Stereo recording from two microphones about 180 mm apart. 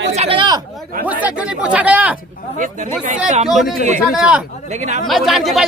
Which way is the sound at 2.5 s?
45° right (ahead or behind).